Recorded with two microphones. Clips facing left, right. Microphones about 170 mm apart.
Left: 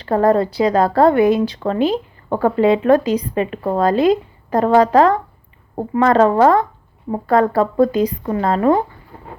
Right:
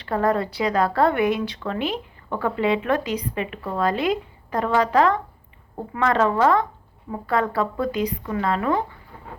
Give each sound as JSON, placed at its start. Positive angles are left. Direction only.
{"t": 0.0, "sound": "speech", "side_deg": 35}